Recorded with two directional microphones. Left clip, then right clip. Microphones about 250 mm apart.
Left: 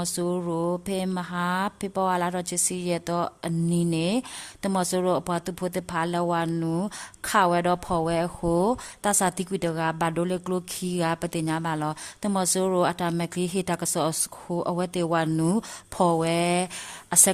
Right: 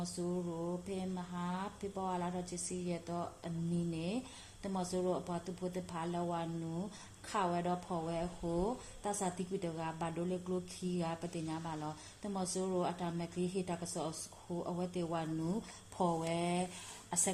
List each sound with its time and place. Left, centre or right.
0.0 s speech: left